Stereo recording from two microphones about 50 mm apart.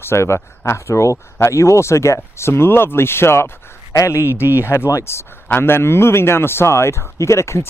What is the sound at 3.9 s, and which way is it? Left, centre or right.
A man's voice, left.